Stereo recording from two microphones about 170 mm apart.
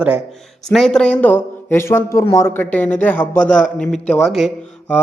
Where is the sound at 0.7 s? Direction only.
5° left (ahead or behind).